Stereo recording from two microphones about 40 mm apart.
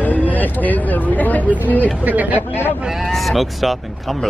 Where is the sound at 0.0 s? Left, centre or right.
Left.